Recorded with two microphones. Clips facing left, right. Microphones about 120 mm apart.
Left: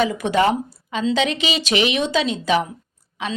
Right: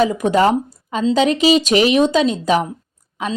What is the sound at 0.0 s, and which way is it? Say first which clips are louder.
A woman's voice: right 4 dB; 45° right (ahead or behind).